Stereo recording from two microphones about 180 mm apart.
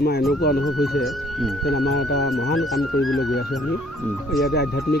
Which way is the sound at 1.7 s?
65° left (ahead or behind).